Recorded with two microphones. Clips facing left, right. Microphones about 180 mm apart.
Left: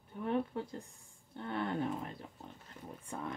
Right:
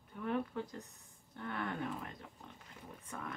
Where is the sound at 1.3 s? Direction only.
30° left (ahead or behind).